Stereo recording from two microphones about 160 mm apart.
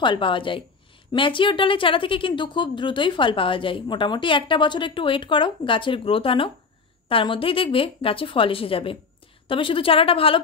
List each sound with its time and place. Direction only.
0.0 s a woman's voice: 30° left (ahead or behind)